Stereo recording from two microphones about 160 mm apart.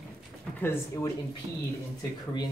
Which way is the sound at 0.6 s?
15° left (ahead or behind).